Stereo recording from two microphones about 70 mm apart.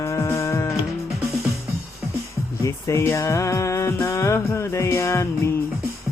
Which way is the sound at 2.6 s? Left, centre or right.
Left.